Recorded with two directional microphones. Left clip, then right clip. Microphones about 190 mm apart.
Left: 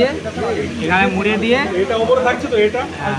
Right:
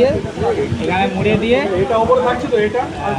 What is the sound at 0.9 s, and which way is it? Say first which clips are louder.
Speech: left 2 dB; 15° left (ahead or behind).